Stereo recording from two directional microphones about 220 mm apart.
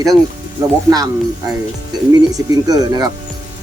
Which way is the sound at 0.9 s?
15° right (ahead or behind).